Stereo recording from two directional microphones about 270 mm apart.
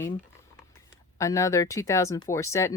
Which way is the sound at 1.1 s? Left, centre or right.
Centre.